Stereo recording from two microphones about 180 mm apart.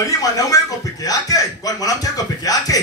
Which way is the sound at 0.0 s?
20° left (ahead or behind).